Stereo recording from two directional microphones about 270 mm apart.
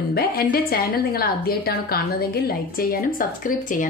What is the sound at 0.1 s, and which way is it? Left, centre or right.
A woman's voice, left.